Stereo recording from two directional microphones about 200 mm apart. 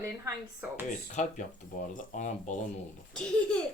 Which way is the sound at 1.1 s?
40° left (ahead or behind).